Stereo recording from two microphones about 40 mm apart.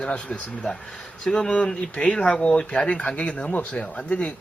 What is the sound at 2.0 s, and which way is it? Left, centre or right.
Speech, left.